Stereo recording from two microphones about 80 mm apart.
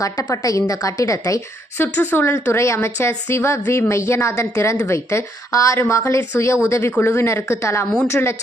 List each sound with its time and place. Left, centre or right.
0.7 s a woman's voice: left
1.8 s speech: left